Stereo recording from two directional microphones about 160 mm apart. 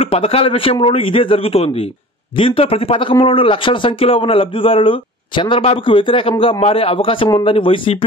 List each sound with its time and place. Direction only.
0.0 s a man's voice: 35° left (ahead or behind)